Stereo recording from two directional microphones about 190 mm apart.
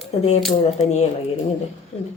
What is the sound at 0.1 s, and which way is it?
Speech, 35° left (ahead or behind).